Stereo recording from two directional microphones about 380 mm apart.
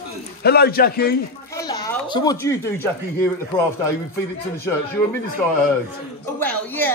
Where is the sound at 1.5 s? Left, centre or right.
Centre.